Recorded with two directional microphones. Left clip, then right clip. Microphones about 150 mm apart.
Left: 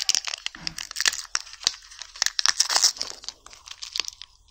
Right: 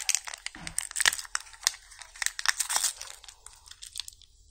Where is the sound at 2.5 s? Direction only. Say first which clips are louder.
Left 8 dB; 10° left (ahead or behind).